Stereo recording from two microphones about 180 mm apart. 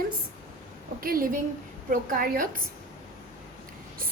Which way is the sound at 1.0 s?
55° right (ahead or behind).